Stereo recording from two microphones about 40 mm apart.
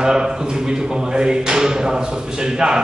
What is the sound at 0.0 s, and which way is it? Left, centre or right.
A man's voice, centre.